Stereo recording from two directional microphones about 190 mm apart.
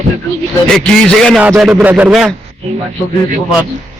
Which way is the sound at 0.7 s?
5° left (ahead or behind).